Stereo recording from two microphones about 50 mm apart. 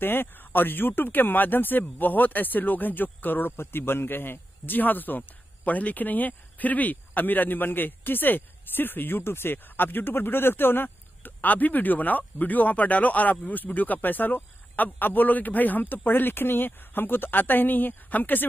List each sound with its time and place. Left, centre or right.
0.0 s speech: left